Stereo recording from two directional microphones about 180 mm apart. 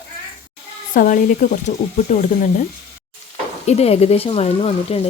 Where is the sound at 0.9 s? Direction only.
50° left (ahead or behind).